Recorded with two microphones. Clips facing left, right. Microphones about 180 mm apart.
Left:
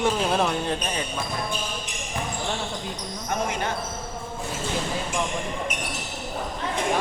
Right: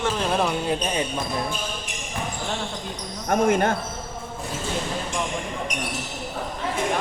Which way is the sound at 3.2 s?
50° right (ahead or behind).